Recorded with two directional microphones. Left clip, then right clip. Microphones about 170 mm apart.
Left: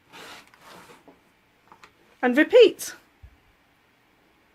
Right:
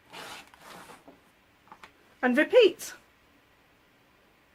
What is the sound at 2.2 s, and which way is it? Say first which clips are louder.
Speech: left 5 dB; 40° left (ahead or behind).